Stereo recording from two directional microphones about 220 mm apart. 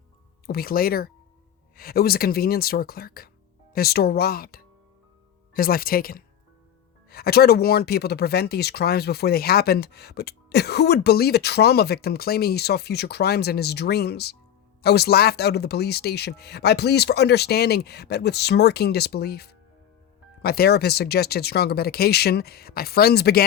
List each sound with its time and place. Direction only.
0.4 s speech: 45° left (ahead or behind)